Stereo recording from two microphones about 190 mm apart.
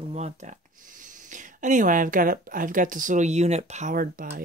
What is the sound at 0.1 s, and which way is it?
Speech, 40° right (ahead or behind).